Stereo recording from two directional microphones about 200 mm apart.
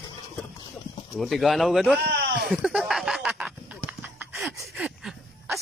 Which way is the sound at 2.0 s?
55° right (ahead or behind).